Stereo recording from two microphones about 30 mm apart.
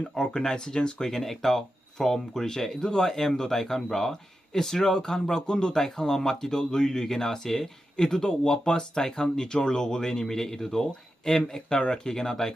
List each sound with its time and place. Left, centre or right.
0.1 s speech: left
5.7 s speech: centre